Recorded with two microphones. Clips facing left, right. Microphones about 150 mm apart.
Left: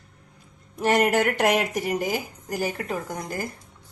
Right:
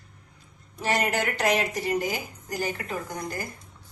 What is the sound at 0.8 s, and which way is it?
Speech, 55° left (ahead or behind).